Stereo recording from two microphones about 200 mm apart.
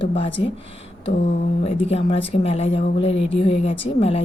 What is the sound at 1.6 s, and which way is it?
Speech, 30° left (ahead or behind).